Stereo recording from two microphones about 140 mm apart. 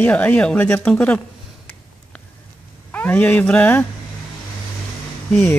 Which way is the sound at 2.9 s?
10° left (ahead or behind).